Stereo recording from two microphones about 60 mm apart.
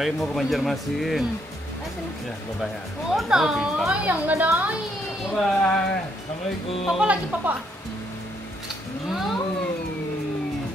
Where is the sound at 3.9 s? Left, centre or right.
Right.